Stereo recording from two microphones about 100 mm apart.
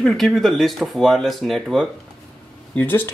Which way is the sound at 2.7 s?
15° left (ahead or behind).